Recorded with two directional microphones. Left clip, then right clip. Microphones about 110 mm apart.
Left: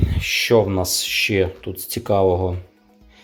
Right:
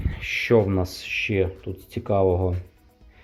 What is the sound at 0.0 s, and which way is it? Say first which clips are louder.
Speech: left 6 dB; 20° left (ahead or behind).